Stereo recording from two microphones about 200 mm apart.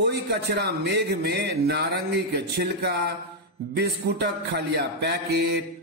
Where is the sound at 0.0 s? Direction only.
55° right (ahead or behind).